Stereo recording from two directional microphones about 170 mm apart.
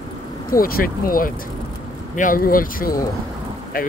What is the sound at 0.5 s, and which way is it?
Speech, 60° left (ahead or behind).